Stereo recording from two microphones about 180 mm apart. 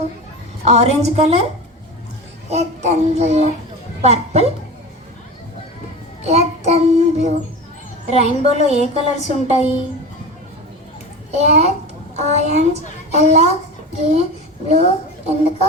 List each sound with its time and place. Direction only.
0.6 s a woman's voice: 35° right (ahead or behind)
2.5 s a woman's voice: 40° right (ahead or behind)
6.2 s a woman's voice: 35° right (ahead or behind)
11.3 s a woman's voice: 35° right (ahead or behind)